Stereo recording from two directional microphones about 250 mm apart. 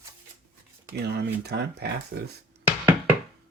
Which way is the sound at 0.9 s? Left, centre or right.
Right.